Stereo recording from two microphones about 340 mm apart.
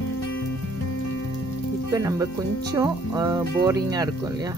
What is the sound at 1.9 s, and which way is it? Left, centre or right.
Speech, centre.